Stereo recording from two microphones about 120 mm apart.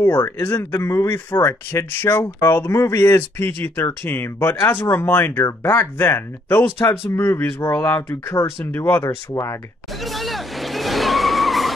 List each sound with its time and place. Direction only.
0.0 s speech: 20° left (ahead or behind)
9.9 s vehicle: centre (ahead or behind)